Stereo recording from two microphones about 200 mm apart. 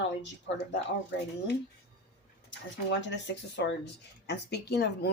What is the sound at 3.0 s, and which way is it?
Speech, 60° left (ahead or behind).